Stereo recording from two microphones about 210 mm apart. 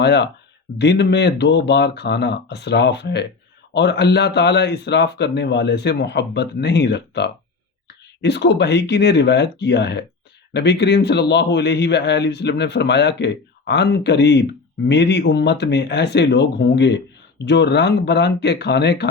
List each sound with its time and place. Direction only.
0.0 s a man's voice: 55° left (ahead or behind)